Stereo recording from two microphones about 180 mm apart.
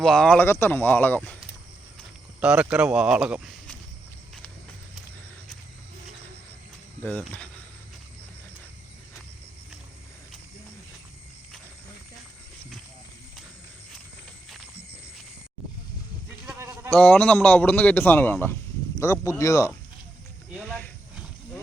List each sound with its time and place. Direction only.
0.0 s a man's voice: 5° left (ahead or behind)
2.4 s speech: 5° right (ahead or behind)
7.0 s speech: 5° left (ahead or behind)
16.6 s sheep: 15° right (ahead or behind)
16.9 s a man's voice: 10° left (ahead or behind)
20.6 s a sound: 10° left (ahead or behind)